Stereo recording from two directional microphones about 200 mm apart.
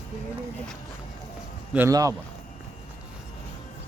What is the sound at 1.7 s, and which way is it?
Speech, 15° right (ahead or behind).